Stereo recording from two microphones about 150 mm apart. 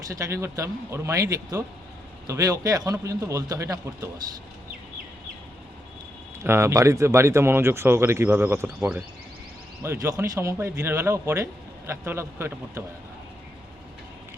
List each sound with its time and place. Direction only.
0.1 s a man's voice: 20° right (ahead or behind)
6.4 s speech: 20° right (ahead or behind)